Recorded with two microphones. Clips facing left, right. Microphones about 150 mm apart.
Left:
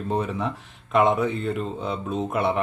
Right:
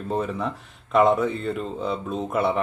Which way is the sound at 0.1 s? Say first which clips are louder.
Even; centre (ahead or behind).